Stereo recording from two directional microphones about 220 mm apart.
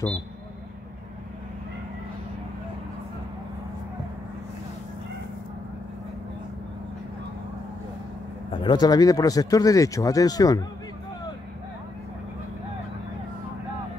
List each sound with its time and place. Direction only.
8.6 s speech: 20° left (ahead or behind)